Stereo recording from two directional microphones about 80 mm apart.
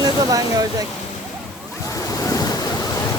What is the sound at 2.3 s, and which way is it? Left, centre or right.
Waves, left.